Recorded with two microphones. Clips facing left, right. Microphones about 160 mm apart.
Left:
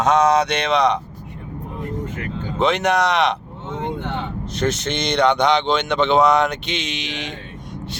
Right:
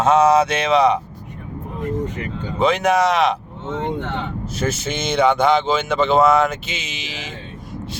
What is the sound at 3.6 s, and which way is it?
Vehicle, 15° left (ahead or behind).